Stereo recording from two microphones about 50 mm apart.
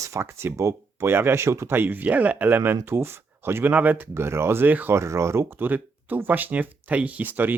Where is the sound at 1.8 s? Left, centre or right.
Right.